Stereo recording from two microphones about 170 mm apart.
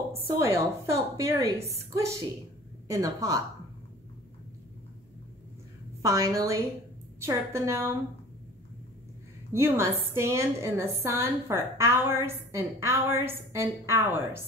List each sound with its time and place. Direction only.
0.1 s a woman's voice: 15° right (ahead or behind)
6.0 s a woman's voice: 20° right (ahead or behind)
9.5 s a woman's voice: 15° right (ahead or behind)